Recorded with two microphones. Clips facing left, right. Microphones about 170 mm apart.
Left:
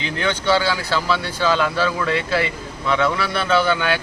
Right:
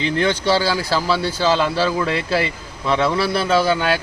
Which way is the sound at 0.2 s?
35° right (ahead or behind).